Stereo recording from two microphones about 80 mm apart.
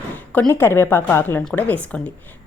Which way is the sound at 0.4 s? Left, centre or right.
Left.